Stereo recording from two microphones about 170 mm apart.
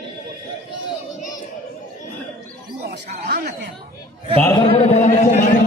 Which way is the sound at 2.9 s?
70° right (ahead or behind).